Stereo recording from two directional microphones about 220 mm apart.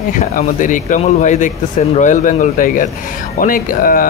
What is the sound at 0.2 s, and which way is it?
Speech, 35° left (ahead or behind).